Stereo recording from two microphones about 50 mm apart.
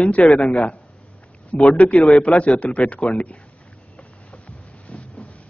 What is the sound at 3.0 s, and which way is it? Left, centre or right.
Speech, centre.